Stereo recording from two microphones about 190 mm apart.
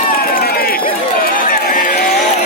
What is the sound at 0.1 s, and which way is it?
Run, 50° left (ahead or behind).